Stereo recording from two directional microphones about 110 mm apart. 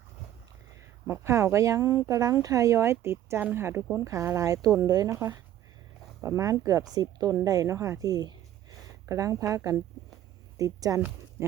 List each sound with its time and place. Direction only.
1.0 s a woman's voice: 25° right (ahead or behind)